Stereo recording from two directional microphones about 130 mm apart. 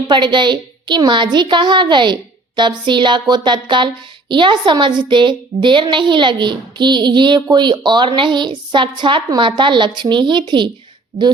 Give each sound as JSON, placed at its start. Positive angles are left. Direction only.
{"t": 0.1, "sound": "speech", "side_deg": -35}